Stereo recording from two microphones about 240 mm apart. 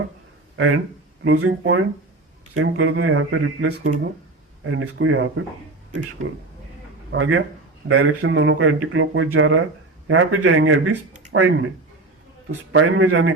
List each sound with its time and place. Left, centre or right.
0.5 s speech: right
7.1 s a man's voice: right